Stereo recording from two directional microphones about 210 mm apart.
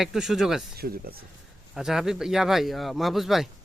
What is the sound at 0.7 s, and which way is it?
Speech, 45° right (ahead or behind).